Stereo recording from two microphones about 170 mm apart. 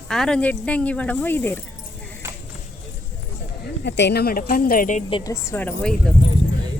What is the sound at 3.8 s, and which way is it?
Speech, 90° left.